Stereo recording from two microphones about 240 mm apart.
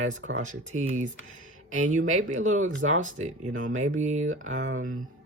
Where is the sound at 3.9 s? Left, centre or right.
Right.